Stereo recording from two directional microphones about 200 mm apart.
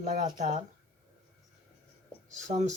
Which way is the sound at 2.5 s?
30° right (ahead or behind).